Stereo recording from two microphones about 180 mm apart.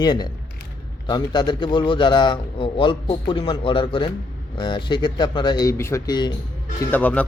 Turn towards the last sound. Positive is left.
turn(degrees=10)  # may be behind; listen again after turning